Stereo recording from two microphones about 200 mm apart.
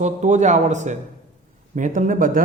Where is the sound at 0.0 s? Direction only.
35° right (ahead or behind).